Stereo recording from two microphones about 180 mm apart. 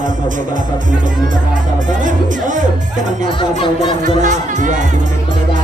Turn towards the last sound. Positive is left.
turn(degrees=-45)  # may be behind; listen again after turning